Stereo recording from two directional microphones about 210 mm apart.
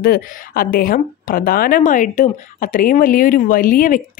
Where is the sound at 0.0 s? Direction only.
45° left (ahead or behind).